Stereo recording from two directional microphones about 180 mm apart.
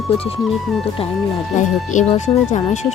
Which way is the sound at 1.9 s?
40° left (ahead or behind).